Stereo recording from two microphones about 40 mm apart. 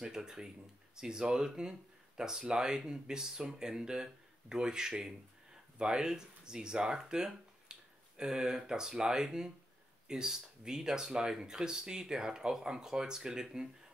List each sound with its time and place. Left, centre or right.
0.0 s speech: centre